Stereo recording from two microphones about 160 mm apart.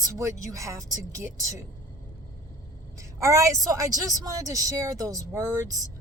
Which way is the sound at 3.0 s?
20° right (ahead or behind).